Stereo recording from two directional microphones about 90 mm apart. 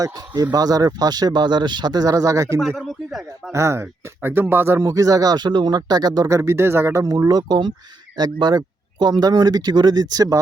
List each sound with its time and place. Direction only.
0.0 s speech: 40° right (ahead or behind)
2.6 s speech: centre (ahead or behind)
3.5 s speech: 30° right (ahead or behind)
4.8 s speech: 40° right (ahead or behind)
6.3 s speech: 30° right (ahead or behind)